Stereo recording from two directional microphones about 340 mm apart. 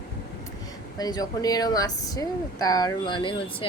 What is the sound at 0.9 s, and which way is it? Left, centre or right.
Speech, centre.